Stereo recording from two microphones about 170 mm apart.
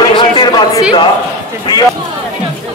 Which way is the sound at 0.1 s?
25° left (ahead or behind).